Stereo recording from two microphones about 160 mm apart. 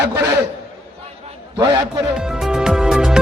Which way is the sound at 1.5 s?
25° right (ahead or behind).